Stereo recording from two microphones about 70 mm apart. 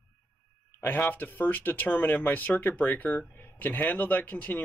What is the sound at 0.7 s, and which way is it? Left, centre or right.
Speech, left.